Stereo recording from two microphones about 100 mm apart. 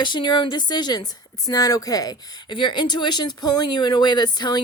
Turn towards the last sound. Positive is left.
turn(degrees=45)  # may be behind; listen again after turning